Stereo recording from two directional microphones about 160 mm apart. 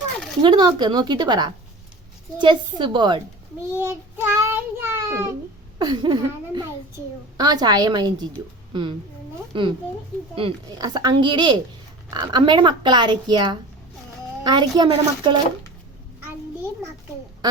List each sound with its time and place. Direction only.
0.4 s speech: 30° right (ahead or behind)
3.8 s child singing: 15° right (ahead or behind)
5.8 s a child's voice: 30° right (ahead or behind)